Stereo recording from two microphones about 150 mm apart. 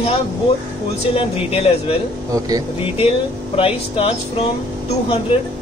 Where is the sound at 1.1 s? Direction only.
40° left (ahead or behind).